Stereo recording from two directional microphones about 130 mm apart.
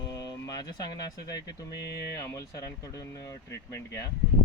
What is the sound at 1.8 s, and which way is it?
Speech, 25° left (ahead or behind).